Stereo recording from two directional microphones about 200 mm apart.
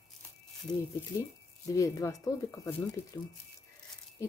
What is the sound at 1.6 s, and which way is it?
Speech, 15° left (ahead or behind).